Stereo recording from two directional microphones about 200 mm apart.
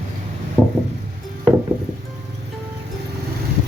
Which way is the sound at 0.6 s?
5° left (ahead or behind).